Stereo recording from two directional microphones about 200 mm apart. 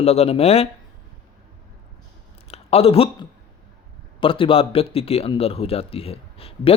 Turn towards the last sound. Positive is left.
turn(degrees=30)  # may be behind; listen again after turning